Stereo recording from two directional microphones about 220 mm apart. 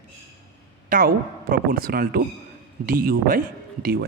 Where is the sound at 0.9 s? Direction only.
40° right (ahead or behind).